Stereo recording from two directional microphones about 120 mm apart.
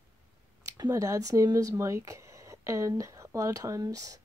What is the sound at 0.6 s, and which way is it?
Speech, 25° right (ahead or behind).